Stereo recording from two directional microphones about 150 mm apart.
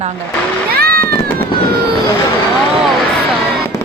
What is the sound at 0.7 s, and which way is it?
Cat, 90° right.